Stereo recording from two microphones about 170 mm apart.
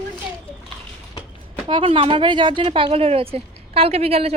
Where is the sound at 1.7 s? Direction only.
30° right (ahead or behind).